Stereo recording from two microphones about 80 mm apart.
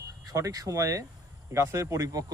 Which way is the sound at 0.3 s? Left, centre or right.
Right.